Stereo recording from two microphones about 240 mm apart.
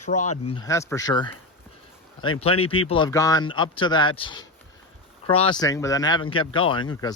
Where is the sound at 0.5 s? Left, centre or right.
Centre.